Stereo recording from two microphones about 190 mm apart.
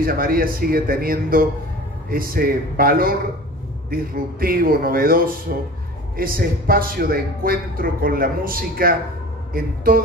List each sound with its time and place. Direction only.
0.0 s speech: 50° right (ahead or behind)